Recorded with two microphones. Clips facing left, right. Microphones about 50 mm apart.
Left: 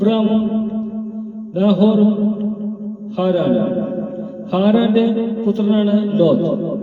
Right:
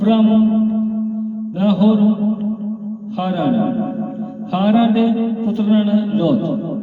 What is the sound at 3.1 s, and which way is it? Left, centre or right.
Speech, right.